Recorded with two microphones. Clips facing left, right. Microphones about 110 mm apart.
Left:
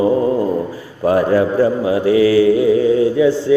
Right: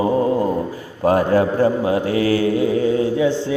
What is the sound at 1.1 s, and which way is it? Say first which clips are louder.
A man's voice: left 2 dB; 30° right (ahead or behind).